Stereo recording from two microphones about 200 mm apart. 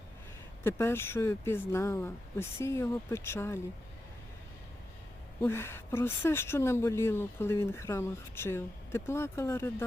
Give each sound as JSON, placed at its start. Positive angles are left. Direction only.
{"t": 0.6, "sound": "speech", "side_deg": 15}
{"t": 5.4, "sound": "speech", "side_deg": 10}